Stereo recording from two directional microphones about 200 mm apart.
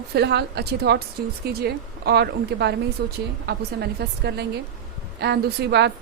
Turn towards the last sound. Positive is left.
turn(degrees=-55)  # may be behind; listen again after turning